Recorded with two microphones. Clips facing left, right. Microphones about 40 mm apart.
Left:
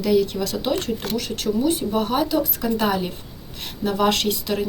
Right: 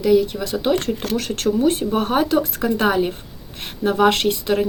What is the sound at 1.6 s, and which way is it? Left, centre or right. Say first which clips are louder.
Speech: right 1 dB; right.